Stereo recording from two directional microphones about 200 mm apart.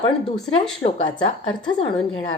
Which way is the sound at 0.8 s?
30° left (ahead or behind).